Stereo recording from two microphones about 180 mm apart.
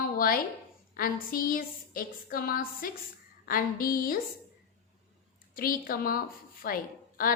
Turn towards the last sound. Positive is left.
turn(degrees=55)  # may be behind; listen again after turning